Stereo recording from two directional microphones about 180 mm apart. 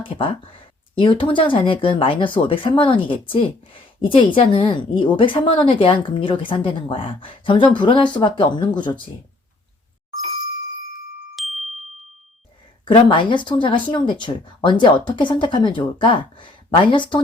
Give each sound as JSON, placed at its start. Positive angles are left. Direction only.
{"t": 0.0, "sound": "speech", "side_deg": 30}
{"t": 11.3, "sound": "glockenspiel", "side_deg": 0}
{"t": 12.8, "sound": "speech", "side_deg": 25}